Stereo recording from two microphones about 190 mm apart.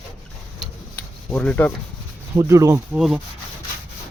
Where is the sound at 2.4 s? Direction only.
15° right (ahead or behind).